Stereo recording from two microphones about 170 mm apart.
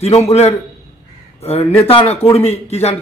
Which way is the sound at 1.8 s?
35° left (ahead or behind).